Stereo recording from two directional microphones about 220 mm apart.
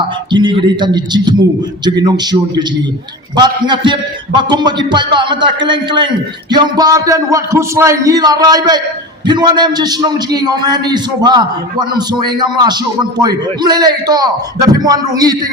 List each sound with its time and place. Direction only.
0.3 s a man's voice: 20° right (ahead or behind)